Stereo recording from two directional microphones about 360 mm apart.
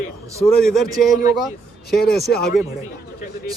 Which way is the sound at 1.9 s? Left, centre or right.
Centre.